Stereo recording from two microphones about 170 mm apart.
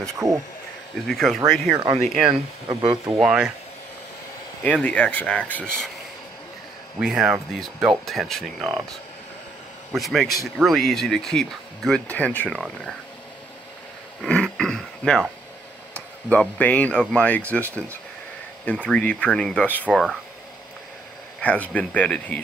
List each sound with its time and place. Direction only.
0.2 s speech: centre (ahead or behind)
2.7 s speech: 30° right (ahead or behind)
3.1 s speech: 5° right (ahead or behind)
4.6 s speech: 10° left (ahead or behind)
7.0 s speech: 5° right (ahead or behind)
9.9 s speech: centre (ahead or behind)
14.2 s throat clearing: 5° left (ahead or behind)
16.3 s speech: 10° left (ahead or behind)
18.7 s speech: 5° left (ahead or behind)
21.4 s speech: 10° left (ahead or behind)